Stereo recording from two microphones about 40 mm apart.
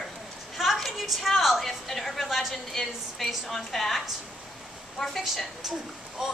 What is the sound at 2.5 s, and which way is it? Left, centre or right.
A woman's voice, centre.